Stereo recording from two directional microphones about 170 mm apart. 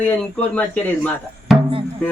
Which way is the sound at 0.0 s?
10° left (ahead or behind).